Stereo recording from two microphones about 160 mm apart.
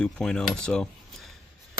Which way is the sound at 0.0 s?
5° left (ahead or behind).